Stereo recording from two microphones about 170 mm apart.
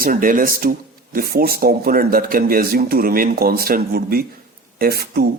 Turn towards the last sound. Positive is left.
turn(degrees=-65)  # may be behind; listen again after turning